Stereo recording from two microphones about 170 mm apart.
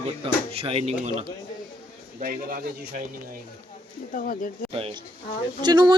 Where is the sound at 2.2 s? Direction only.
55° right (ahead or behind).